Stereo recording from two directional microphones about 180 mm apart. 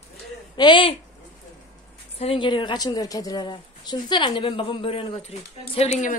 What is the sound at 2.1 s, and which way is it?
A woman's voice, 30° left (ahead or behind).